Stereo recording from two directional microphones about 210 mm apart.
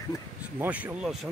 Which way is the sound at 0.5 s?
5° right (ahead or behind).